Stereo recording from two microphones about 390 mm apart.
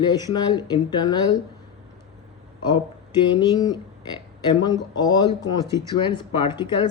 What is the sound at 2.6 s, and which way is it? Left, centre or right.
Speech, centre.